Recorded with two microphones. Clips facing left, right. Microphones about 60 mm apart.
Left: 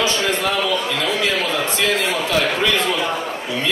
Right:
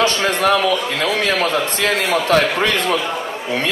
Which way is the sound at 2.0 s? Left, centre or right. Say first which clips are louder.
Right 4 dB; right.